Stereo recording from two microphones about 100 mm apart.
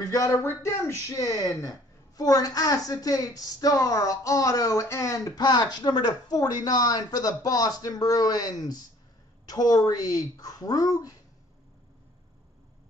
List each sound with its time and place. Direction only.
0.0 s a woman's voice: 35° left (ahead or behind)